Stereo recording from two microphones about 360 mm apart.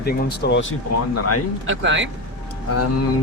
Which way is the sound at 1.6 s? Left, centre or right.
Right.